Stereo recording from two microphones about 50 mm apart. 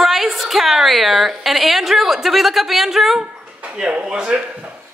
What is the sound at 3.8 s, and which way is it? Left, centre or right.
Speech, centre.